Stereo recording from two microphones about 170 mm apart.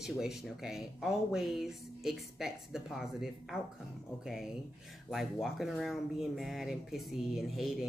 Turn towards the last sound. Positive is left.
turn(degrees=0)  # may be behind; listen again after turning